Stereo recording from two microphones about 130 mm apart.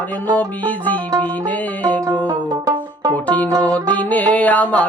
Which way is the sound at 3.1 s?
10° left (ahead or behind).